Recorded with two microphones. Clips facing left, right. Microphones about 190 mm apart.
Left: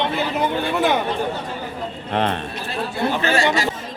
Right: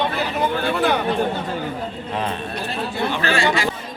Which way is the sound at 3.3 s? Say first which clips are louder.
Even; 40° left (ahead or behind).